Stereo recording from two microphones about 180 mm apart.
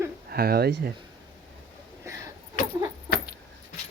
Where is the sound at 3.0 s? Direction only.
60° left (ahead or behind).